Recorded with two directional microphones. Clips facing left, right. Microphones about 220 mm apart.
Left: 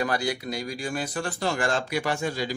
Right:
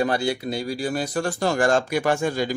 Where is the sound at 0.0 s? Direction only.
25° right (ahead or behind).